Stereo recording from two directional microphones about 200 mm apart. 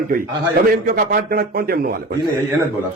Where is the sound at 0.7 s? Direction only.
45° right (ahead or behind).